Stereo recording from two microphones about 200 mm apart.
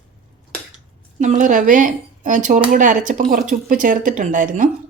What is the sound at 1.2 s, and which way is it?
Speech, 35° right (ahead or behind).